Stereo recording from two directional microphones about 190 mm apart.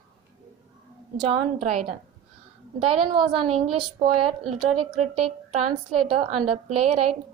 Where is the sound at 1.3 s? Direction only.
35° right (ahead or behind).